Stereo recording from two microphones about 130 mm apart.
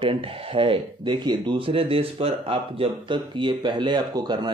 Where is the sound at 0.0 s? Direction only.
45° right (ahead or behind).